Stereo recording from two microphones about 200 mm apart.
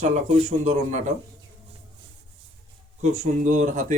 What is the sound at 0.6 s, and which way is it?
Speech, 35° right (ahead or behind).